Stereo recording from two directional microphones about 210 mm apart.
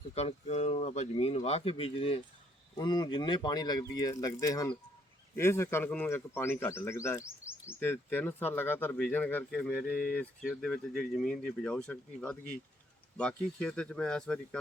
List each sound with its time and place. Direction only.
0.1 s speech: 30° left (ahead or behind); by 14.6 s 5° left (ahead or behind)